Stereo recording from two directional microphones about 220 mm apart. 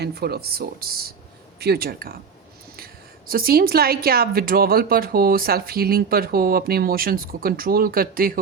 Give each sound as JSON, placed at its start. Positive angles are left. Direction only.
{"t": 0.0, "sound": "a woman's voice", "side_deg": -45}